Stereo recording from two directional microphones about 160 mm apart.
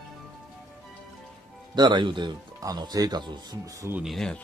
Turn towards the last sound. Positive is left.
turn(degrees=0)  # may be behind; listen again after turning